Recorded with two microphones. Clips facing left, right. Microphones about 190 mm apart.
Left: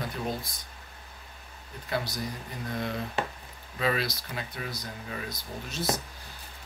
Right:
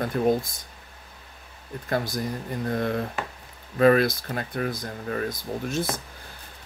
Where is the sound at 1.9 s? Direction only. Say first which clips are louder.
Right 5 dB; 50° right (ahead or behind).